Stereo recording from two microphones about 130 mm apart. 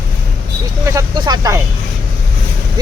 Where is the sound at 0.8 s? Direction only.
25° right (ahead or behind).